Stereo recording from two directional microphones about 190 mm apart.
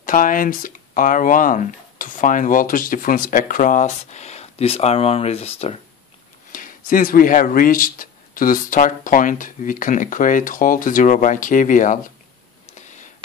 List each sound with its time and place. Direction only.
0.0 s speech: 45° left (ahead or behind)
6.5 s speech: 45° left (ahead or behind)
12.6 s a sound: 40° left (ahead or behind)